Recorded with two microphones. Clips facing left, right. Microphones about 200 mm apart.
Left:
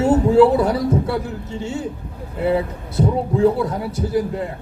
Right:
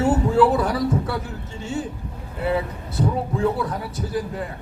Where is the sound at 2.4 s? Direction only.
20° left (ahead or behind).